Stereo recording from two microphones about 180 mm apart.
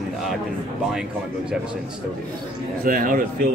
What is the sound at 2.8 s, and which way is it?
Speech, 50° right (ahead or behind).